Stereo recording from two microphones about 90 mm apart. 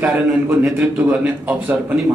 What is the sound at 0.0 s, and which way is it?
A man's voice, 20° right (ahead or behind).